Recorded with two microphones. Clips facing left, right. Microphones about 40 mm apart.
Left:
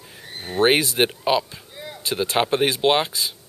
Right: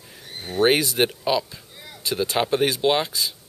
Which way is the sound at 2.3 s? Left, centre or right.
Left.